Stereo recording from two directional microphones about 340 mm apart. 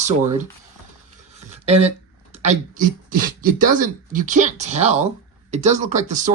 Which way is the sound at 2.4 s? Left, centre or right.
Right.